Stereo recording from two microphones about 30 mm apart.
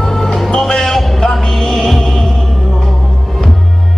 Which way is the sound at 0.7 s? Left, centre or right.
Centre.